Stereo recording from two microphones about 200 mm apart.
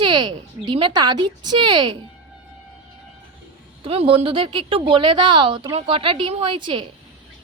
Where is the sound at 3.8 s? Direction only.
30° right (ahead or behind).